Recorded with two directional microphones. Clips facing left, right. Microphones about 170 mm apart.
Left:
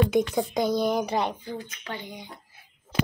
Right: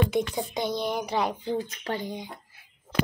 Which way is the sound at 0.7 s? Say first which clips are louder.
Left 3 dB; 40° left (ahead or behind).